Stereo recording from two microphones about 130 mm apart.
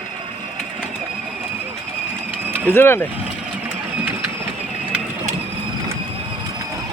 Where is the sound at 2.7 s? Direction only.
15° left (ahead or behind).